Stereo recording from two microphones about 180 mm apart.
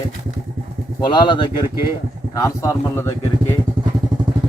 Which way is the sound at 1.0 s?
25° left (ahead or behind).